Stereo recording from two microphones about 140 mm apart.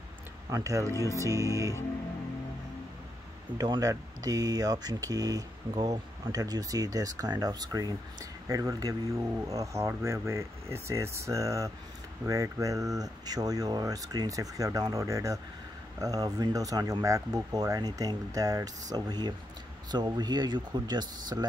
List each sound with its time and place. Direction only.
0.5 s speech: 25° right (ahead or behind)
3.5 s speech: 30° right (ahead or behind)